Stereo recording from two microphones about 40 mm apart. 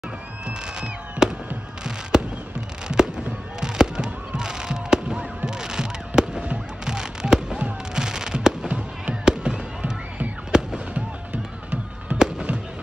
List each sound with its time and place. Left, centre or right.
0.5 s a sound: right
2.1 s fireworks: centre
12.2 s fireworks: centre